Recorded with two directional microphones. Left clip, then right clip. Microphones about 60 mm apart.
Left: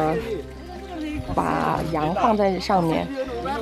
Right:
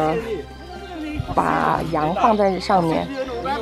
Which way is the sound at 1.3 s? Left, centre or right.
Centre.